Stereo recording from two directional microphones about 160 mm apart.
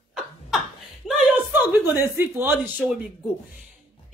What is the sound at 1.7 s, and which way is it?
Speech, 15° right (ahead or behind).